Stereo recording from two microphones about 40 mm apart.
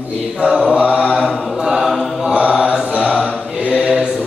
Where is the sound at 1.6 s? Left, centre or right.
Centre.